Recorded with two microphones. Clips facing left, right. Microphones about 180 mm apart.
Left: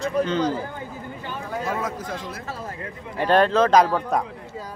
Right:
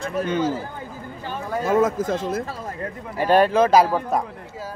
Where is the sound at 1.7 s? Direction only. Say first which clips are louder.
Right 12 dB; 50° right (ahead or behind).